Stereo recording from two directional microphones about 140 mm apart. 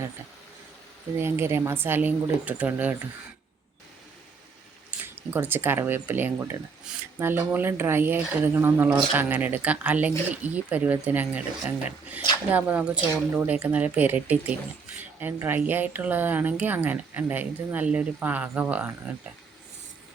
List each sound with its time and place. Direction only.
1.2 s speech: 20° right (ahead or behind)
4.9 s speech: 15° right (ahead or behind)